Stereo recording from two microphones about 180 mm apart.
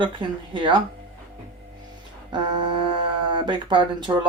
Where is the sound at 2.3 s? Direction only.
30° right (ahead or behind).